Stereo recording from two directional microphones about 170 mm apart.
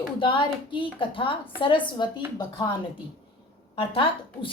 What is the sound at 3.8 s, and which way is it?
Speech, 30° left (ahead or behind).